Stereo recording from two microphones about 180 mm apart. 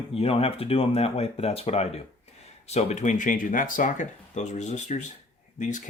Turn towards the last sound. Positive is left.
turn(degrees=45)  # may be behind; listen again after turning